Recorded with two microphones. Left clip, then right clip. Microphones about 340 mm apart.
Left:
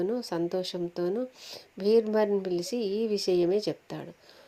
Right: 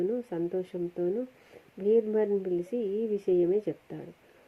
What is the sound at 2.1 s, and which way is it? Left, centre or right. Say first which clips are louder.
Speech: left 1 dB; left.